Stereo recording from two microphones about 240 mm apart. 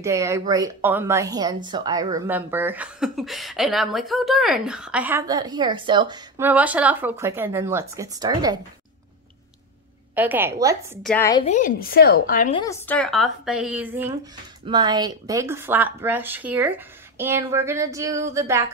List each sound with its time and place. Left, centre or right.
0.0 s speech: centre
10.1 s speech: centre
11.0 s a woman's voice: centre
11.4 s a woman's voice: left
12.5 s a woman's voice: centre
14.7 s speech: centre